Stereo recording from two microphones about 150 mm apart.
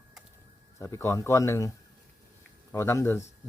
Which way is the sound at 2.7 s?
15° left (ahead or behind).